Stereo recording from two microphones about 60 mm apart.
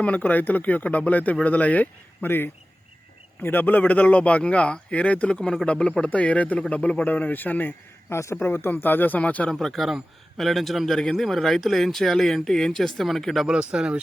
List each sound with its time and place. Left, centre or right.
0.0 s speech: left
8.1 s a man's voice: left
8.4 s speech: left
9.5 s a man's voice: centre
13.5 s speech: centre